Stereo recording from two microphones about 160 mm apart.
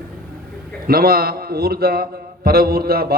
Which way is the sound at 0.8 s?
70° right (ahead or behind).